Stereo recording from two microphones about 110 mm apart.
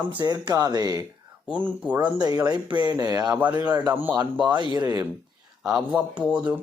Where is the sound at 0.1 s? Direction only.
45° right (ahead or behind).